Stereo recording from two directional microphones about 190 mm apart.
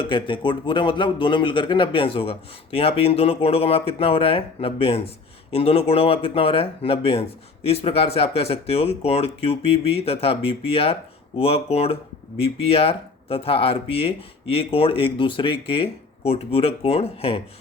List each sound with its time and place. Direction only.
0.0 s a man's voice: 25° left (ahead or behind)